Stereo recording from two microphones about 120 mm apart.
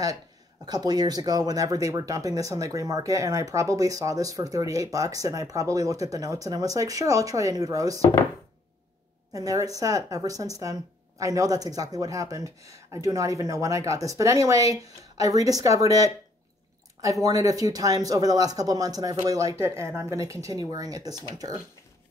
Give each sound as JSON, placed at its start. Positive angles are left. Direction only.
{"t": 0.7, "sound": "speech", "side_deg": -35}
{"t": 9.3, "sound": "speech", "side_deg": -30}